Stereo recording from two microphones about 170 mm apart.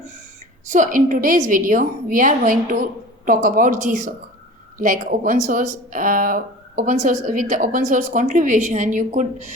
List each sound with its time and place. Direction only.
0.7 s speech: 50° right (ahead or behind)